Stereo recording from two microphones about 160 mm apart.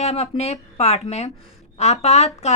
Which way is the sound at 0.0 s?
40° left (ahead or behind).